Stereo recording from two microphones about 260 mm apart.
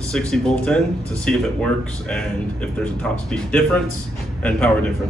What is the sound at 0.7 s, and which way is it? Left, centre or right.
Speech, centre.